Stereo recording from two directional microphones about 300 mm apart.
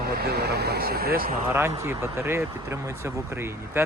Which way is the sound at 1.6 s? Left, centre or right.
Centre.